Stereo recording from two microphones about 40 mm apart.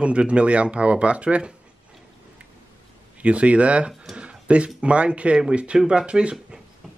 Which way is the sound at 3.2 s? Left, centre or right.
Right.